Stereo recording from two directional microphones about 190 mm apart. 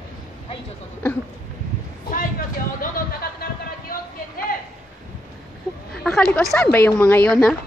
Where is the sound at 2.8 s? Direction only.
50° left (ahead or behind).